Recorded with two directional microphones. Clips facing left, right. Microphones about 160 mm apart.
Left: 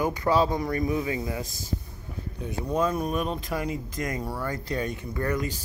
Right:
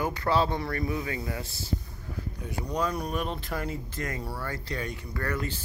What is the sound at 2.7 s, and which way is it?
Speech, 20° left (ahead or behind).